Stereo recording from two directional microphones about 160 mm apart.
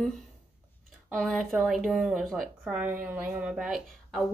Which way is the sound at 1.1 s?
5° left (ahead or behind).